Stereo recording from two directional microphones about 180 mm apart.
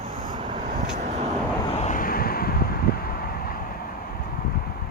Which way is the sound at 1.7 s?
35° left (ahead or behind).